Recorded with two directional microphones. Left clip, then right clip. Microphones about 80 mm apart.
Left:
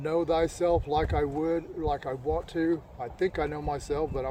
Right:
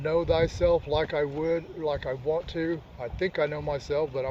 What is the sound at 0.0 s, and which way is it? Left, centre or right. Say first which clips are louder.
Speech: right 2 dB; left.